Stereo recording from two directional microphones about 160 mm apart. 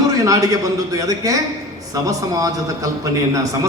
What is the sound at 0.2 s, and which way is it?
A man's voice, 20° right (ahead or behind).